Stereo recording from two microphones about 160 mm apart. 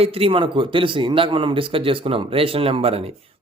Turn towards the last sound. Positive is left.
turn(degrees=-35)  # may be behind; listen again after turning